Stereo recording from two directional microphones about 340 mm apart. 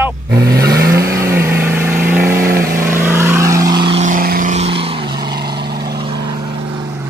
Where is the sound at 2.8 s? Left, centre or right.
Centre.